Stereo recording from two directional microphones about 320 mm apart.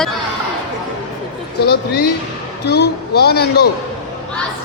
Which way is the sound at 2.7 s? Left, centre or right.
Left.